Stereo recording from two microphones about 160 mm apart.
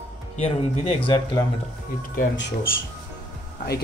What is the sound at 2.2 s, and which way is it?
Speech, 90° left.